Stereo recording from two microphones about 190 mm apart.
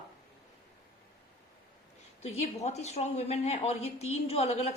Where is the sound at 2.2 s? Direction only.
35° left (ahead or behind).